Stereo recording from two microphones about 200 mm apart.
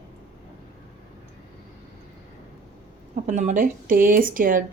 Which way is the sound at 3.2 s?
40° right (ahead or behind).